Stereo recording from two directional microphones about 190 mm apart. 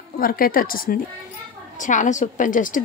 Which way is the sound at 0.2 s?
50° left (ahead or behind).